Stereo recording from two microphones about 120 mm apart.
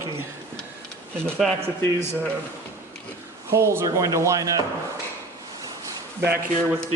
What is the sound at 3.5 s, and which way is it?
Speech, 25° right (ahead or behind).